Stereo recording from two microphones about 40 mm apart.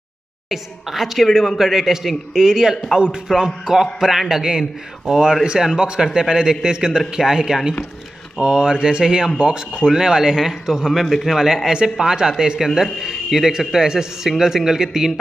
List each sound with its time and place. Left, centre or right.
0.5 s a man's voice: centre
5.8 s mantra: right
6.1 s a man's voice: centre
8.4 s mantra: right
9.8 s a man's voice: centre